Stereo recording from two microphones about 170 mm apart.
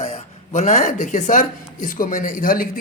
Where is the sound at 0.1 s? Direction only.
40° left (ahead or behind).